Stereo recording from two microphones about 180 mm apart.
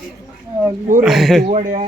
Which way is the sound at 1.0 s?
Centre (ahead or behind).